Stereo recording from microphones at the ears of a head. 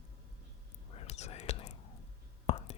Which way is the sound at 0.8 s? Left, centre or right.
Left.